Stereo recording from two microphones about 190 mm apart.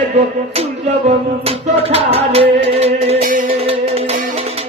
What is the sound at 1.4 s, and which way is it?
Music, 30° right (ahead or behind).